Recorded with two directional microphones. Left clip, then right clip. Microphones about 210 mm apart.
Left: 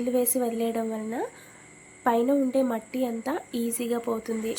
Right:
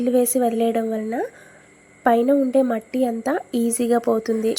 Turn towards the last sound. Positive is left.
turn(degrees=-20)  # may be behind; listen again after turning